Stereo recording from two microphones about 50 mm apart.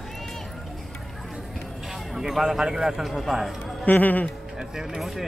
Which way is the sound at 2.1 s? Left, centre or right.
Centre.